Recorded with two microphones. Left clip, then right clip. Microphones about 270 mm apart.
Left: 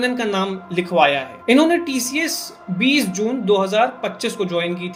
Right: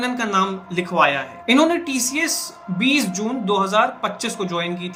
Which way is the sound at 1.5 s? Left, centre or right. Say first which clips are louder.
Left 1 dB; centre.